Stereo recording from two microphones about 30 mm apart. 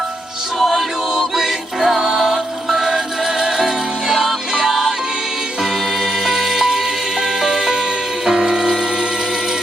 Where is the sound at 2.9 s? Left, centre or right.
Centre.